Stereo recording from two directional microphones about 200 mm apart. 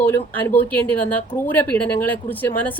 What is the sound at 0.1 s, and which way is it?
A woman's voice, 10° left (ahead or behind).